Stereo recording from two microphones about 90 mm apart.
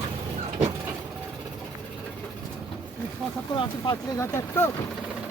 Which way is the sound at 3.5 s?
65° left (ahead or behind).